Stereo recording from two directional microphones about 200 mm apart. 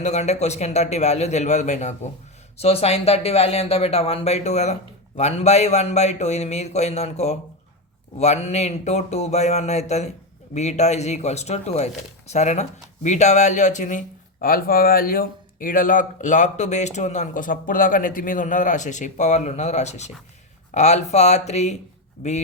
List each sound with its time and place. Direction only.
0.0 s speech: 35° left (ahead or behind)